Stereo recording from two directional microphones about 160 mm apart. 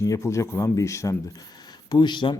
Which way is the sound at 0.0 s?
20° left (ahead or behind).